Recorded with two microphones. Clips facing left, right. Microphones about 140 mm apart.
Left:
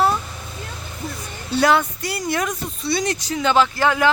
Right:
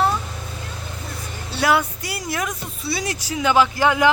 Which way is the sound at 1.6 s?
10° right (ahead or behind).